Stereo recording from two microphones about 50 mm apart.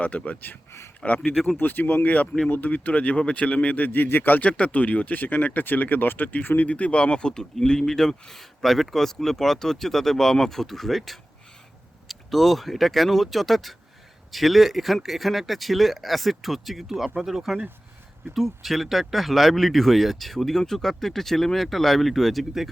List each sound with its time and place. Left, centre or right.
0.0 s a man's voice: left
6.7 s speech: left; by 22.7 s centre